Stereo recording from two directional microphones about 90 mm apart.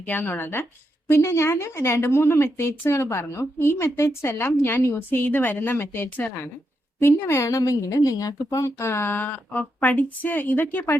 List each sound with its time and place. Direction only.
0.0 s a woman's voice: 20° left (ahead or behind)
7.0 s a woman's voice: 30° left (ahead or behind)